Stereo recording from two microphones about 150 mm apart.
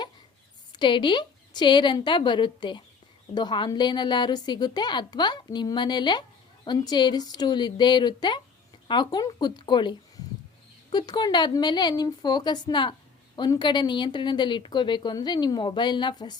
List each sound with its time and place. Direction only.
0.7 s a woman's voice: 30° left (ahead or behind)
10.9 s a woman's voice: 30° left (ahead or behind)